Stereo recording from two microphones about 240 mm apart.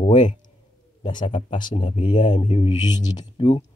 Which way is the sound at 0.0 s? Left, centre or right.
Left.